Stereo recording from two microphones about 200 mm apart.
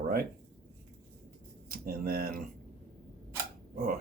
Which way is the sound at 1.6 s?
50° right (ahead or behind).